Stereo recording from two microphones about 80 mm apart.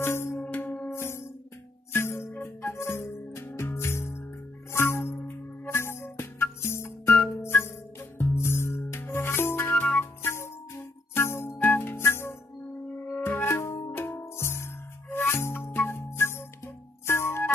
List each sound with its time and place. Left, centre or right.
0.0 s music: left